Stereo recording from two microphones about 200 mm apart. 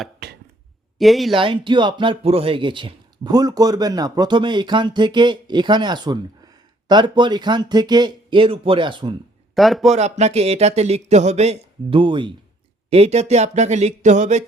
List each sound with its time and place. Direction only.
0.9 s a man's voice: centre (ahead or behind)
1.3 s speech: 25° right (ahead or behind)
9.6 s a man's voice: centre (ahead or behind)
9.9 s a man's voice: 35° right (ahead or behind)